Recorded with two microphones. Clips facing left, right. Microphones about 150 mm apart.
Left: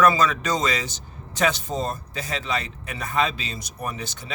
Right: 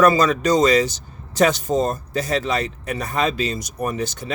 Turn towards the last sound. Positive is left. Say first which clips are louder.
# right 8 dB
turn(degrees=-45)  # may be behind; listen again after turning